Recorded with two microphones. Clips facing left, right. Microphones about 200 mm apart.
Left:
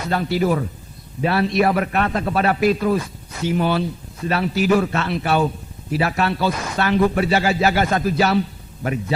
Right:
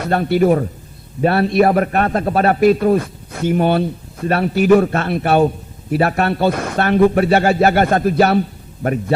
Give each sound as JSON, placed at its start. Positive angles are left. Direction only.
{"t": 0.0, "sound": "a man's voice", "side_deg": -55}